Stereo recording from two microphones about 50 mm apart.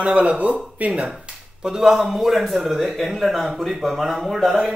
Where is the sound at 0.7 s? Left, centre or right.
Right.